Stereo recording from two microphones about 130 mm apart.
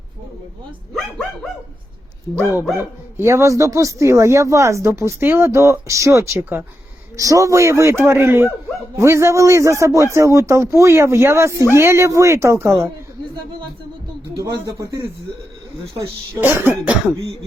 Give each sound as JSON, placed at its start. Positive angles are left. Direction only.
{"t": 2.3, "sound": "speech", "side_deg": -15}
{"t": 14.4, "sound": "speech", "side_deg": -25}